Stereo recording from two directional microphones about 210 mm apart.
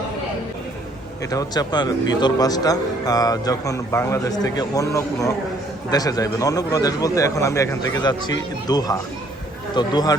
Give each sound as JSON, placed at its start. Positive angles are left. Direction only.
{"t": 1.3, "sound": "a man's voice", "side_deg": 15}